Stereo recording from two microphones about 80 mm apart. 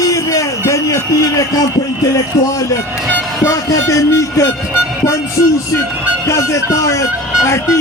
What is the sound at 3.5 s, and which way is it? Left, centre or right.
Speech, left.